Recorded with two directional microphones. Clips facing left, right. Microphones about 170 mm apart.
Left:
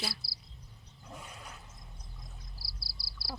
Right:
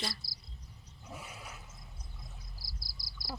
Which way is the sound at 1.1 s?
5° right (ahead or behind).